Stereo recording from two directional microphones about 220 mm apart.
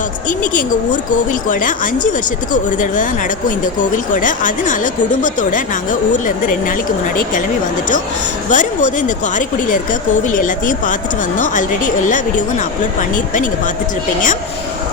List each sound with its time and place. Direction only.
1.1 s speech: 35° left (ahead or behind)
8.4 s speech: 35° left (ahead or behind)